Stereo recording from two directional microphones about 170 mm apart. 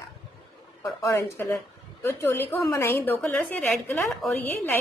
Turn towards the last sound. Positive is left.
turn(degrees=10)  # may be behind; listen again after turning